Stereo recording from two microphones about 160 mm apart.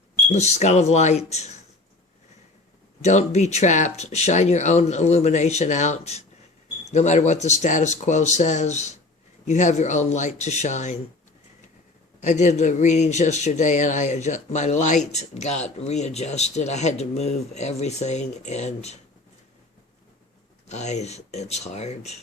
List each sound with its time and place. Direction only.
0.3 s speech: 45° left (ahead or behind)
3.0 s speech: 45° left (ahead or behind)
12.2 s speech: 50° left (ahead or behind)
20.7 s speech: 45° left (ahead or behind)